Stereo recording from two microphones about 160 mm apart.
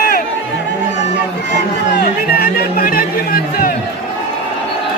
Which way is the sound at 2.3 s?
65° left (ahead or behind).